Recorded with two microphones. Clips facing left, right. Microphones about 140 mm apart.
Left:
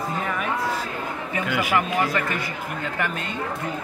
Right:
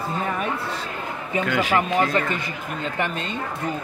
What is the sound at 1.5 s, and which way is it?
Speech, 10° left (ahead or behind).